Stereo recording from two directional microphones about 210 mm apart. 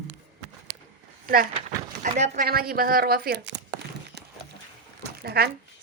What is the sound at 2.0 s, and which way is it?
A woman's voice, 40° right (ahead or behind).